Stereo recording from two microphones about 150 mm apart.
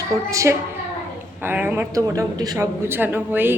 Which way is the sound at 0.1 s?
20° right (ahead or behind).